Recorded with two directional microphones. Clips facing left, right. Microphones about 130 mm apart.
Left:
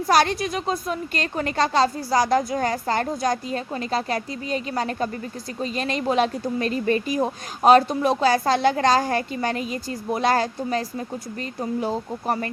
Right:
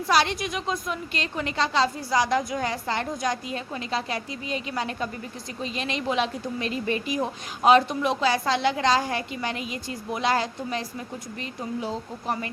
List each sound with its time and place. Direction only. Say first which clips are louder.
0.1 s a woman's voice: left 4 dB; 45° left (ahead or behind)